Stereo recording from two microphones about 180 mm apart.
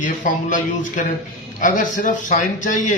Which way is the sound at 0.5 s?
45° left (ahead or behind).